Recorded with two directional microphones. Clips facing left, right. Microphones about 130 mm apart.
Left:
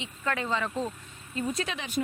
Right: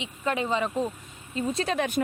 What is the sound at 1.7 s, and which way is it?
Speech, 55° right (ahead or behind).